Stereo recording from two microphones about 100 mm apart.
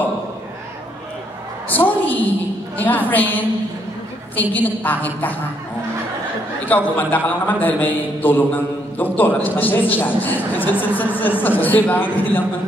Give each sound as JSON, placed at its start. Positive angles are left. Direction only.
{"t": 1.7, "sound": "a sound", "side_deg": 15}
{"t": 2.8, "sound": "a man's voice", "side_deg": 20}
{"t": 6.6, "sound": "a man's voice", "side_deg": 15}